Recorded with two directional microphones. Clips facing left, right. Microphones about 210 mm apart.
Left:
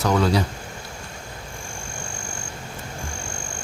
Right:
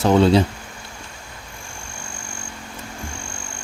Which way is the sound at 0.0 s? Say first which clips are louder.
Right 6 dB; 25° right (ahead or behind).